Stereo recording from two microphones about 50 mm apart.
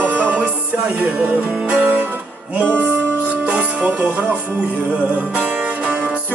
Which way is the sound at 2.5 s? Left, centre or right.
Right.